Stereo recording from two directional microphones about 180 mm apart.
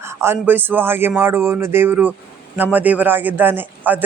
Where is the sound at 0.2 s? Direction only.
10° right (ahead or behind).